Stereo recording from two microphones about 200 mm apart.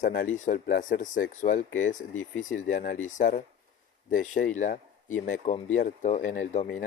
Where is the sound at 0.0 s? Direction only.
45° left (ahead or behind).